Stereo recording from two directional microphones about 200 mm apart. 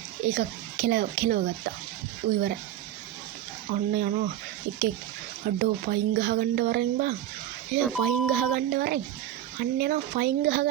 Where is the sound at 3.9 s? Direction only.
45° right (ahead or behind).